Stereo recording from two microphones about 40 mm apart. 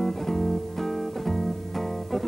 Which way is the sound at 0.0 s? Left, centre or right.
Centre.